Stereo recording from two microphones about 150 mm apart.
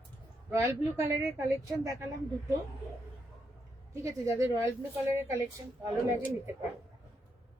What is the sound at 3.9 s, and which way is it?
A woman's voice, 20° right (ahead or behind).